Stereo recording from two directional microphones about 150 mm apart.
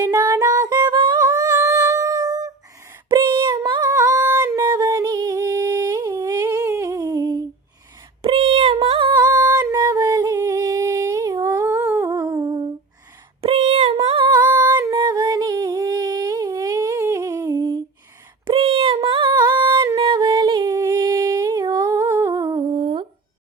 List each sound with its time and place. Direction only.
0.0 s music: 20° right (ahead or behind)
1.2 s a sound: 25° right (ahead or behind)
3.1 s female singing: 30° right (ahead or behind)
3.9 s a sound: 20° right (ahead or behind)
8.2 s female singing: 40° right (ahead or behind); by 10.2 s 20° right (ahead or behind)
10.3 s humming: 20° right (ahead or behind)
13.4 s female singing: 40° right (ahead or behind)
14.4 s a sound: 20° right (ahead or behind)
18.4 s child singing: 35° right (ahead or behind)
19.3 s singing: 30° right (ahead or behind)
21.8 s humming: 15° right (ahead or behind); by 23.0 s 35° right (ahead or behind)